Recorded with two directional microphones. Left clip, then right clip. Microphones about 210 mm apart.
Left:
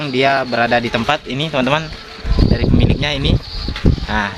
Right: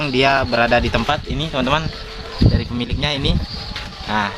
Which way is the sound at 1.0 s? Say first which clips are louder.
Left 3 dB; 10° left (ahead or behind).